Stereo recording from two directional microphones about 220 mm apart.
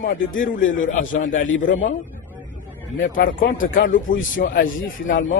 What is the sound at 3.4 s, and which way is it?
A man's voice, 40° left (ahead or behind).